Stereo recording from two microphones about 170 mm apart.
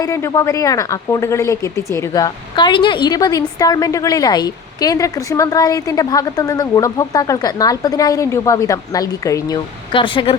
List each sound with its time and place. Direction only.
0.0 s speech: 15° left (ahead or behind)